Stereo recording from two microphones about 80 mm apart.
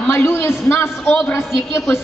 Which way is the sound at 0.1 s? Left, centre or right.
Left.